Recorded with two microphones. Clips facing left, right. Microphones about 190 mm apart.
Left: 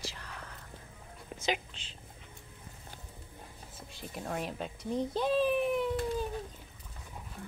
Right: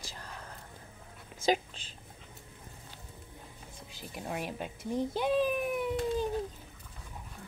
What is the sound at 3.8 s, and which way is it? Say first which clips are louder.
A woman's voice: left 2 dB; centre (ahead or behind).